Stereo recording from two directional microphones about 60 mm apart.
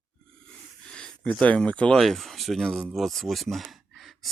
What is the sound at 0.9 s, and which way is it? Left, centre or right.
Speech, centre.